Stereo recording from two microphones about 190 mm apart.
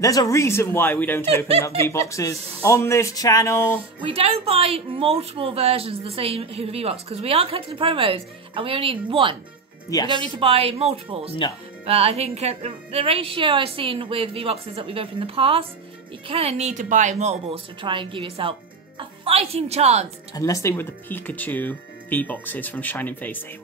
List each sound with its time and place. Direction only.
0.0 s speech: 20° left (ahead or behind)
1.2 s speech: 30° right (ahead or behind)
1.9 s speech: 15° left (ahead or behind)
4.0 s a woman's voice: 30° right (ahead or behind)
20.3 s speech: 15° left (ahead or behind)